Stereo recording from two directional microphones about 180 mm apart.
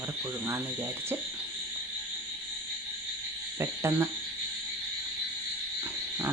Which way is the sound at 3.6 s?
15° right (ahead or behind).